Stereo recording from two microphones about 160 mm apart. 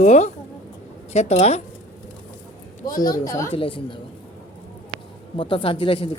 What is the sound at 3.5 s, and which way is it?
Speech, 35° left (ahead or behind).